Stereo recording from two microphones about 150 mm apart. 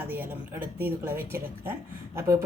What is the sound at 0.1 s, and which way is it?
A woman's voice, 15° right (ahead or behind).